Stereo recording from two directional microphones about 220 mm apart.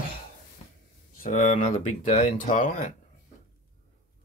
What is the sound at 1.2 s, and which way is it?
Speech, 35° left (ahead or behind).